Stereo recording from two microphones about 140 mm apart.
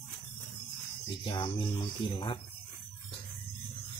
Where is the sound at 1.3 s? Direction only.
35° left (ahead or behind).